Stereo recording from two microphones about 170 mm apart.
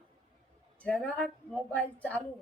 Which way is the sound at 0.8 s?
5° left (ahead or behind).